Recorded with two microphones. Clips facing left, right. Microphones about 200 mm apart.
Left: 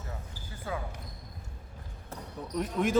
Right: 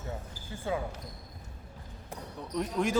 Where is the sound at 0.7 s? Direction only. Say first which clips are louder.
Right 4 dB; 25° right (ahead or behind).